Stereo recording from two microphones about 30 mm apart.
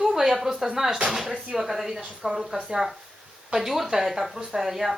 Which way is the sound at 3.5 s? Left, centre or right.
Centre.